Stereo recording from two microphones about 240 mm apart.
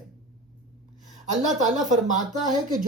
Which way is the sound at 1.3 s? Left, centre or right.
Right.